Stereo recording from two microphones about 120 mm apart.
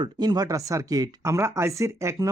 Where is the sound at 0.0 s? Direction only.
35° right (ahead or behind).